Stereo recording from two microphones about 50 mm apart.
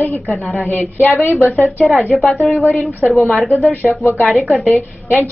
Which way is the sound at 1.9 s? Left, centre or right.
Centre.